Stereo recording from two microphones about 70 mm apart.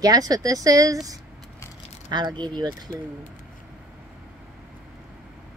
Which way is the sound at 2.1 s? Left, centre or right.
Right.